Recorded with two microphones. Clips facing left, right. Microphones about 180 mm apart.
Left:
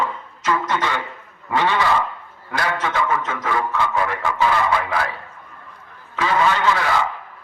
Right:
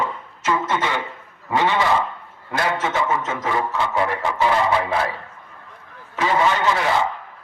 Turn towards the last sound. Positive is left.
turn(degrees=-20)  # may be behind; listen again after turning